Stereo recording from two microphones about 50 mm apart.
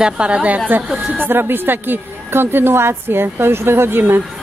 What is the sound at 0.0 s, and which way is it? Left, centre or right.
Speech, right.